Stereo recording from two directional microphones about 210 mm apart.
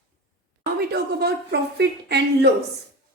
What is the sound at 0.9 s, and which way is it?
A woman's voice, 50° right (ahead or behind).